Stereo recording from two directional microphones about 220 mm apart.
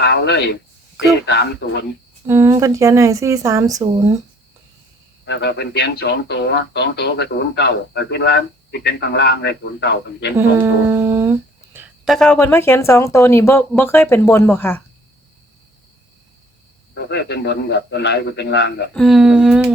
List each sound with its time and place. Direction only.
0.0 s speech: 50° left (ahead or behind)
2.2 s speech: 10° right (ahead or behind)
5.2 s speech: 50° left (ahead or behind)
10.3 s a sound: 10° right (ahead or behind)
12.0 s speech: centre (ahead or behind)
16.9 s speech: 50° left (ahead or behind)
18.9 s a sound: centre (ahead or behind)